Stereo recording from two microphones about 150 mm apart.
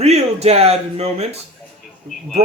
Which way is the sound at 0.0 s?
45° right (ahead or behind).